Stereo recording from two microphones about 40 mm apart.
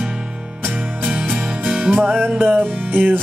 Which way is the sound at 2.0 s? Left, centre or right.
Right.